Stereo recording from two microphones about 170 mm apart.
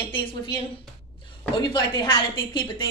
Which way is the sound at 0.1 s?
30° left (ahead or behind).